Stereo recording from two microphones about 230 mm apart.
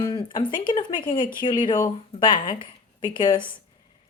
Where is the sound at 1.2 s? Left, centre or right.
Left.